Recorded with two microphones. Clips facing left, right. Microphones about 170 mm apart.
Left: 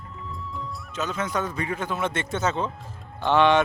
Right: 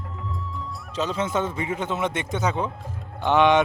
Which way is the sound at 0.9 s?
30° right (ahead or behind).